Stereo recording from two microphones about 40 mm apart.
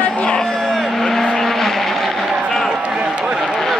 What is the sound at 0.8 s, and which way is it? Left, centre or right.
Vehicle, centre.